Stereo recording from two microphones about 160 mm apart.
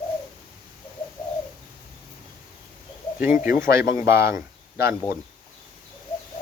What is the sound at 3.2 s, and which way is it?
Speech, 60° left (ahead or behind).